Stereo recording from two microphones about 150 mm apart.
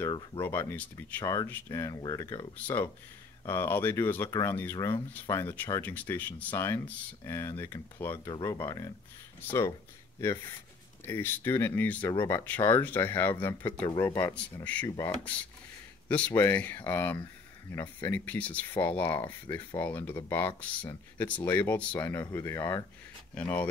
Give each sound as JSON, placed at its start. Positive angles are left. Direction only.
{"t": 0.4, "sound": "speech", "side_deg": 15}
{"t": 11.1, "sound": "speech", "side_deg": 15}
{"t": 16.1, "sound": "speech", "side_deg": 10}